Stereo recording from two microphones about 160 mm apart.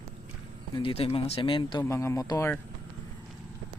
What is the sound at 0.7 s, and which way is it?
Speech, 35° left (ahead or behind).